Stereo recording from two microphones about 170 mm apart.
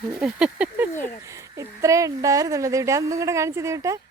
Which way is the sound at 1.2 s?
15° right (ahead or behind).